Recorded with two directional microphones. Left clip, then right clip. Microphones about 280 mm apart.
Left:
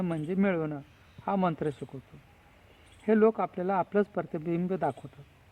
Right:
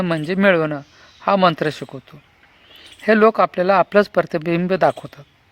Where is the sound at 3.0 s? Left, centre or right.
Right.